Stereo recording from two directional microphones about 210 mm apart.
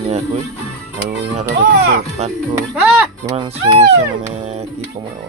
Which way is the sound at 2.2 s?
30° right (ahead or behind).